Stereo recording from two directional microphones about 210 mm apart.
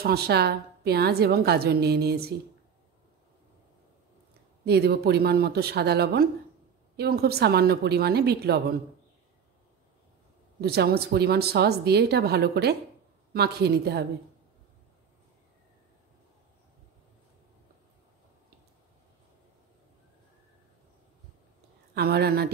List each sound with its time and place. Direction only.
0.0 s a woman's voice: 50° right (ahead or behind)
4.6 s a woman's voice: 50° right (ahead or behind)
10.6 s a woman's voice: 50° right (ahead or behind)
21.9 s a woman's voice: 50° right (ahead or behind)